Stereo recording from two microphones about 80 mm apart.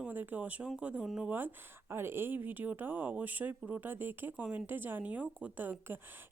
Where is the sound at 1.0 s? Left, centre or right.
Centre.